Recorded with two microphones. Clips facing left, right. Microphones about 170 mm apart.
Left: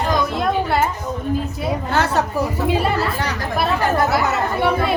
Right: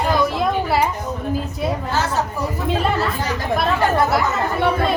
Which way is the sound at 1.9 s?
60° left (ahead or behind).